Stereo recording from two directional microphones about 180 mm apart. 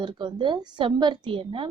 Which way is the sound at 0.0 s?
25° right (ahead or behind).